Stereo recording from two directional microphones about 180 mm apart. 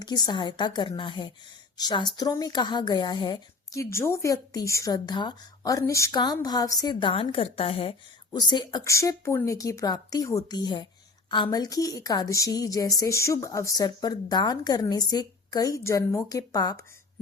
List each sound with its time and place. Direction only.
0.0 s speech: 25° left (ahead or behind)